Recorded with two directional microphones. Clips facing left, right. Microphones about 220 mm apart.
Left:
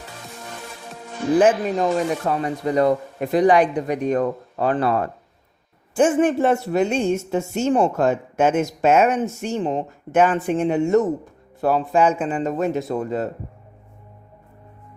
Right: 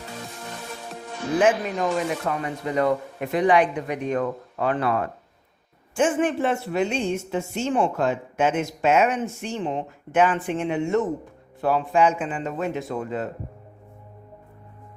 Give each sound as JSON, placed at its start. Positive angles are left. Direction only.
{"t": 1.4, "sound": "a man's voice", "side_deg": 35}